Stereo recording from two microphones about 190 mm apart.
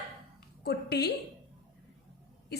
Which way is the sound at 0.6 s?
60° left (ahead or behind).